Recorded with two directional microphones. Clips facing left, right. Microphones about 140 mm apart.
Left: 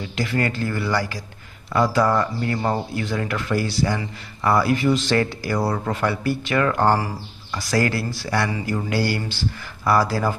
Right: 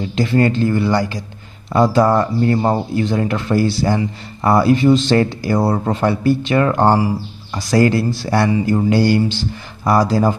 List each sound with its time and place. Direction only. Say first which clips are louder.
0.1 s speech: right 8 dB; 25° right (ahead or behind)